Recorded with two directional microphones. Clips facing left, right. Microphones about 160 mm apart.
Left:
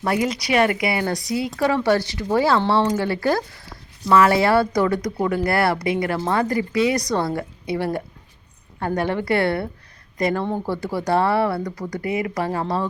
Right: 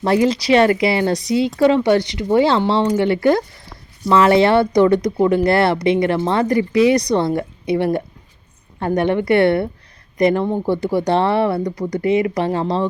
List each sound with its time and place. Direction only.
0.0 s speech: 30° right (ahead or behind)